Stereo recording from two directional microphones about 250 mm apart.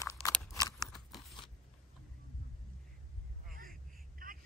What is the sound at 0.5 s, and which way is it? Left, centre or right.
Scissors, centre.